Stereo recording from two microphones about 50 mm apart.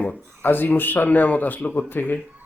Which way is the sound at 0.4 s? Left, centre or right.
Left.